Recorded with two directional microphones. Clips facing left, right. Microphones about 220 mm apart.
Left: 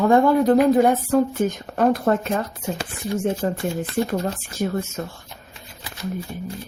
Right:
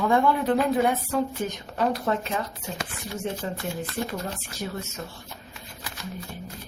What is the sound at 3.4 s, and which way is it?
Speech, 50° left (ahead or behind).